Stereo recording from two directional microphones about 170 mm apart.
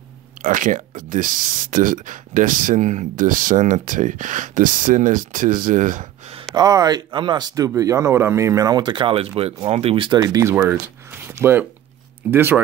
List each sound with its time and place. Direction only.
0.4 s speech: 50° right (ahead or behind)
6.3 s speech: 20° right (ahead or behind)